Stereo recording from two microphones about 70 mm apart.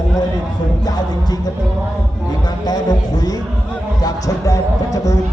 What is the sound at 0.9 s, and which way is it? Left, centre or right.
Music, left.